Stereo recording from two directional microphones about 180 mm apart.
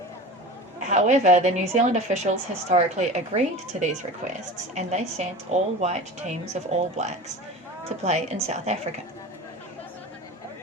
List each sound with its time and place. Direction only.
0.9 s a woman's voice: 40° right (ahead or behind)